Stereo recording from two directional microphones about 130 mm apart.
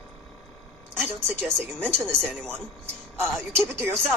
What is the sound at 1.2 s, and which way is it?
Speech, 5° left (ahead or behind).